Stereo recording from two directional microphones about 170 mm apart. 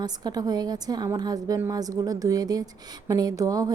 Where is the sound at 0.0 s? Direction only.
25° right (ahead or behind).